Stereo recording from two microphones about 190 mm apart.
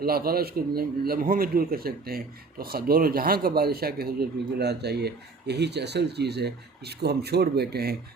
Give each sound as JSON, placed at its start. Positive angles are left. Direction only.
{"t": 0.0, "sound": "a man's voice", "side_deg": -55}